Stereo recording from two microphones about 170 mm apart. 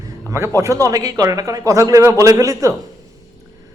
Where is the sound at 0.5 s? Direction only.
20° right (ahead or behind).